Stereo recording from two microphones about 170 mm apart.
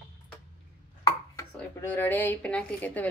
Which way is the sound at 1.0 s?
20° left (ahead or behind).